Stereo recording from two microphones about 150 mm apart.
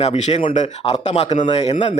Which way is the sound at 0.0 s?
45° left (ahead or behind).